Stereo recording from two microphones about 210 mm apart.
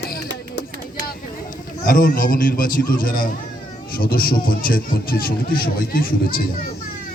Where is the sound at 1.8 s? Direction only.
40° left (ahead or behind).